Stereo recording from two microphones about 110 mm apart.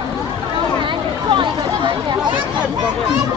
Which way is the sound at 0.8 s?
50° right (ahead or behind).